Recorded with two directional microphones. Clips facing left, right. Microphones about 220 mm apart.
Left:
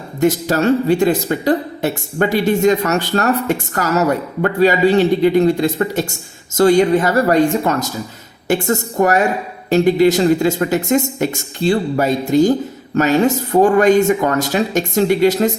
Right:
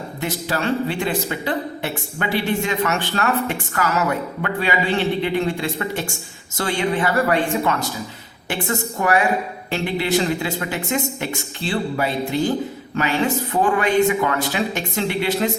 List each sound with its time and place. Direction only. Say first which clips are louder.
0.2 s a woman's voice: left 10 dB; 45° left (ahead or behind)